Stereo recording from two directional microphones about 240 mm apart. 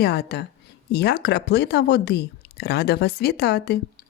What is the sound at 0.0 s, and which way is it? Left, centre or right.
Speech, left.